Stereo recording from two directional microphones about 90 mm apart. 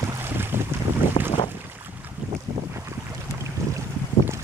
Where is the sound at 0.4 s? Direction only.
25° right (ahead or behind).